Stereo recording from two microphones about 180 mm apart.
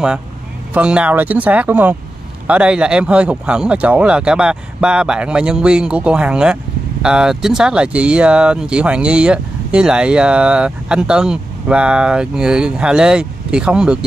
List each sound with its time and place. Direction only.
0.7 s speech: 5° right (ahead or behind)